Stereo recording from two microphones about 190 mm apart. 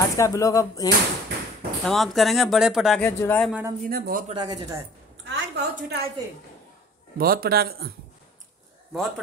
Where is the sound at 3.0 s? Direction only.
10° left (ahead or behind).